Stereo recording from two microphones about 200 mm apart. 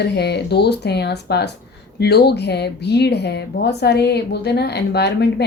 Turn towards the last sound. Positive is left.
turn(degrees=55)  # may be behind; listen again after turning